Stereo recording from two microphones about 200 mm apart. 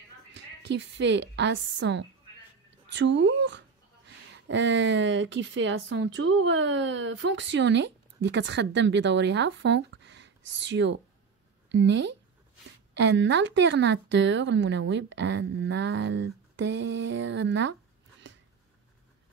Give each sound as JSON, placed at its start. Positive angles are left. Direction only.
{"t": 0.3, "sound": "a woman's voice", "side_deg": -65}